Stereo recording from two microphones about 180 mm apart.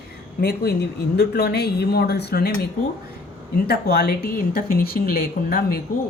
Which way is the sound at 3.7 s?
60° left (ahead or behind).